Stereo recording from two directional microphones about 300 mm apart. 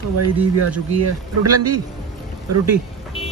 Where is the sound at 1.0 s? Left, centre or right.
Right.